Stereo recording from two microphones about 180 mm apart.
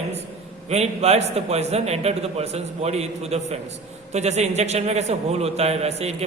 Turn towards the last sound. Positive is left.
turn(degrees=-35)  # may be behind; listen again after turning